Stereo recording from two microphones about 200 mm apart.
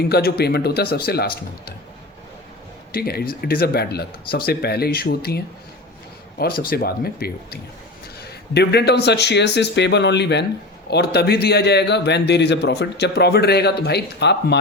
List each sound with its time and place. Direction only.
0.0 s speech: 50° left (ahead or behind)
2.9 s speech: 50° left (ahead or behind)
6.4 s a man's voice: 50° left (ahead or behind)